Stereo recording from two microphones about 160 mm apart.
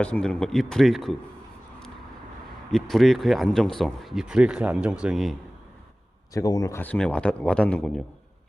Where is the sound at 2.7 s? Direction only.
Centre (ahead or behind).